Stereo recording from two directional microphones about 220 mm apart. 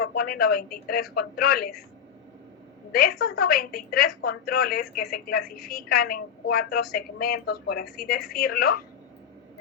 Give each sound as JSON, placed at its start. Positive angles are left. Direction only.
{"t": 0.0, "sound": "a woman's voice", "side_deg": 45}
{"t": 2.9, "sound": "a woman's voice", "side_deg": 45}